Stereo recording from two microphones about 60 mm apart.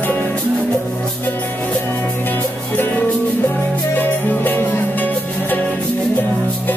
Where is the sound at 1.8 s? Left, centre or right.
Left.